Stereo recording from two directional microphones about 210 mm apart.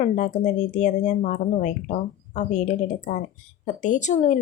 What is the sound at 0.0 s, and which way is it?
Speech, 35° left (ahead or behind).